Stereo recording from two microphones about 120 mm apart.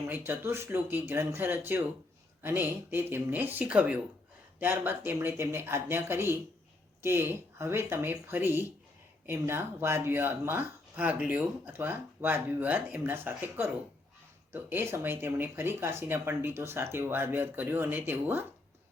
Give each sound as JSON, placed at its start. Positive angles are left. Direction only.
{"t": 0.1, "sound": "speech", "side_deg": -20}